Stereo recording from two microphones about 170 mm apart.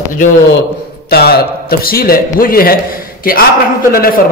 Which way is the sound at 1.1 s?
65° left (ahead or behind).